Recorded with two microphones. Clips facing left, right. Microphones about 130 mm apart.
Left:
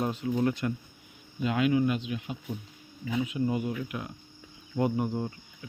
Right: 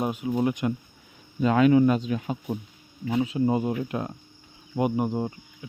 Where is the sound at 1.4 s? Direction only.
45° right (ahead or behind).